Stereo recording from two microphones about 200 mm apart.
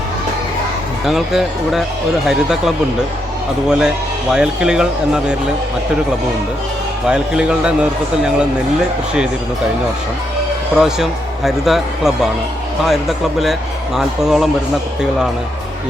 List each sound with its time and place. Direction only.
1.0 s speech: centre (ahead or behind)
7.1 s speech: 5° right (ahead or behind)
10.8 s speech: centre (ahead or behind)